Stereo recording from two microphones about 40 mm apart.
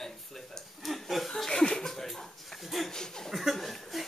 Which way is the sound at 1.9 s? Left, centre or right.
Centre.